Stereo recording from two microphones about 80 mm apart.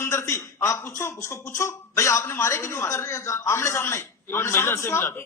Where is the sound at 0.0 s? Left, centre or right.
Left.